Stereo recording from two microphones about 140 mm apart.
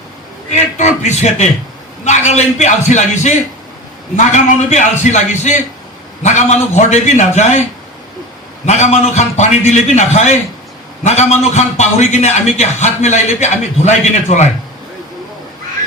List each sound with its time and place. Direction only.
0.5 s a man's voice: 55° left (ahead or behind)
8.6 s a man's voice: 55° left (ahead or behind)